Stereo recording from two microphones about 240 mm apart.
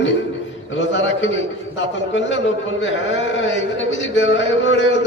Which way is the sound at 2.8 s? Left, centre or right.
Left.